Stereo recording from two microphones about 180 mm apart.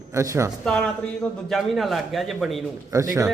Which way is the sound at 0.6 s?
5° left (ahead or behind).